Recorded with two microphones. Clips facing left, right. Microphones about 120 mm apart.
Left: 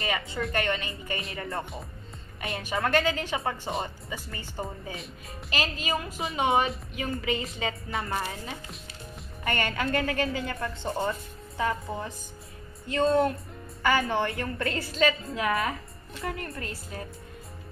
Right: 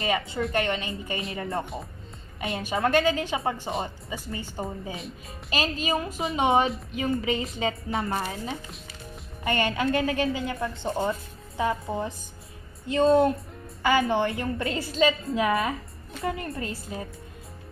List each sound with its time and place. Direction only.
0.0 s a woman's voice: 25° right (ahead or behind)
9.4 s a woman's voice: 20° right (ahead or behind)